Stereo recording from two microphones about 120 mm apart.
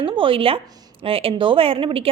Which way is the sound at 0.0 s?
45° right (ahead or behind).